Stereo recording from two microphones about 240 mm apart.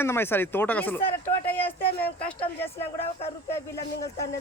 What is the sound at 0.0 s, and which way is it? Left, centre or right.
A man's voice, centre.